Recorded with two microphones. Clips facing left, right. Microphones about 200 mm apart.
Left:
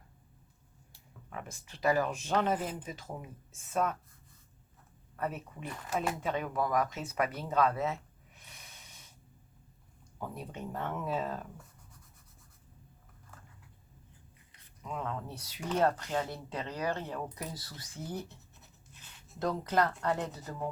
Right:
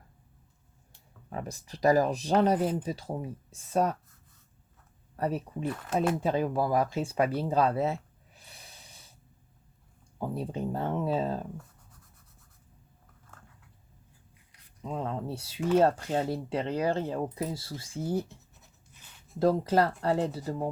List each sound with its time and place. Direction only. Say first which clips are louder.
1.3 s speech: right 7 dB; 35° right (ahead or behind)
5.1 s speech: right 6 dB; 35° right (ahead or behind)
5.6 s speech: right 8 dB; 5° right (ahead or behind)
6.1 s speech: right 6 dB; 30° right (ahead or behind)
8.4 s snort: right 3 dB; 30° right (ahead or behind)
10.2 s speech: right 8 dB; 30° right (ahead or behind)
14.8 s speech: right 5 dB; 30° right (ahead or behind)
19.4 s speech: right 6 dB; 30° right (ahead or behind)